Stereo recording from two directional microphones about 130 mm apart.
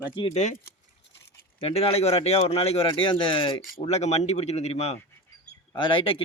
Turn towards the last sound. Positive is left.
turn(degrees=45)  # may be behind; listen again after turning